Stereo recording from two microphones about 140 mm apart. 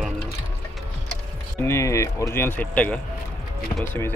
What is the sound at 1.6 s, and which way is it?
Speech, 20° left (ahead or behind).